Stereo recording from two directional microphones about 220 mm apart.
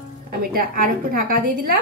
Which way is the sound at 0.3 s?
40° right (ahead or behind).